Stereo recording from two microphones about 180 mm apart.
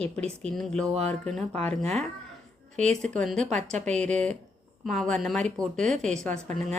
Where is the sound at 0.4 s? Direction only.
Centre (ahead or behind).